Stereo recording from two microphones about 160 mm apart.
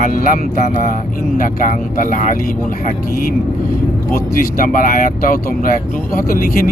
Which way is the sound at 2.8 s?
65° left (ahead or behind).